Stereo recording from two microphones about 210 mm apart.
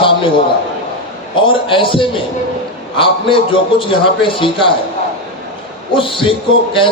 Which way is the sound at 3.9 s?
25° left (ahead or behind).